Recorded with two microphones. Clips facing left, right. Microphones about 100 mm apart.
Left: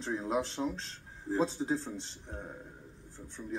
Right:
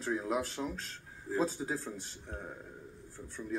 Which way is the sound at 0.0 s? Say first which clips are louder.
Left 1 dB; 25° left (ahead or behind).